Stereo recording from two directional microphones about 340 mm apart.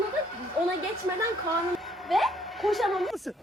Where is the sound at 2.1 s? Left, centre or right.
Centre.